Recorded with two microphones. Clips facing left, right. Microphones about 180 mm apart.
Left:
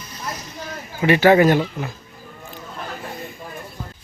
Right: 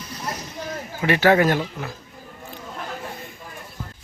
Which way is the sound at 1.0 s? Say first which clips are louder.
Left 4 dB; centre (ahead or behind).